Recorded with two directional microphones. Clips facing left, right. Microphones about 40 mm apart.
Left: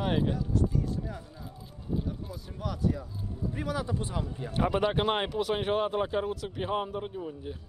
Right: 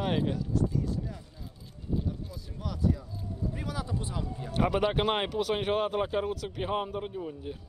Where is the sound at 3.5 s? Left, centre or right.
Left.